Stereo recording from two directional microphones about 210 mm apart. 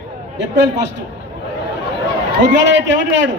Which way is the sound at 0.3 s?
55° right (ahead or behind).